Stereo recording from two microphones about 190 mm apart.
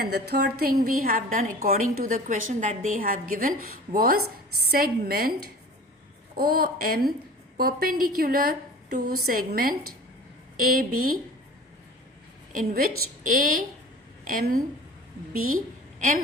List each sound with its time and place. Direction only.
0.0 s a woman's voice: 60° right (ahead or behind)
6.3 s a woman's voice: 50° right (ahead or behind)
12.5 s a woman's voice: 50° right (ahead or behind)
15.5 s a sound: 45° right (ahead or behind)